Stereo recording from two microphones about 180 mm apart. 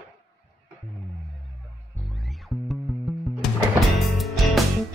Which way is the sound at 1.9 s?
Centre (ahead or behind).